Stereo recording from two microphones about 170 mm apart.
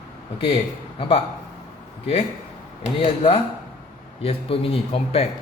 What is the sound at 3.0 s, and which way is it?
Speech, 35° left (ahead or behind).